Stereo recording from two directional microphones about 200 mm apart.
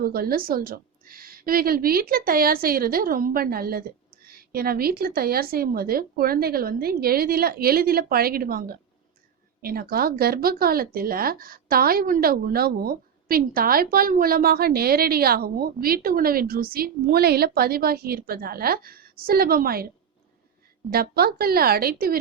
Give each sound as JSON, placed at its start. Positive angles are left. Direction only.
{"t": 0.0, "sound": "speech", "side_deg": -50}
{"t": 20.9, "sound": "speech", "side_deg": -50}